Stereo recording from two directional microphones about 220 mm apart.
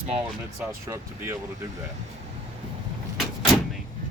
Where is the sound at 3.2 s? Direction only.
Centre (ahead or behind).